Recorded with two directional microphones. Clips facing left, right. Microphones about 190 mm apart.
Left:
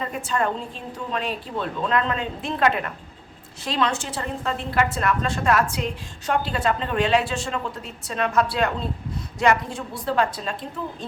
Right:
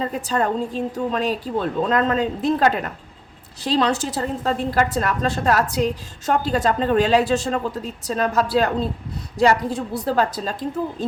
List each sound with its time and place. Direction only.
0.0 s a woman's voice: 35° right (ahead or behind)